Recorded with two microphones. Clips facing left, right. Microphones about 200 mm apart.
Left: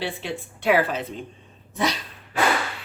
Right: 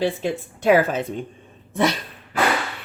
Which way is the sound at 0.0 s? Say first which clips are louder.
Right 7 dB; 45° right (ahead or behind).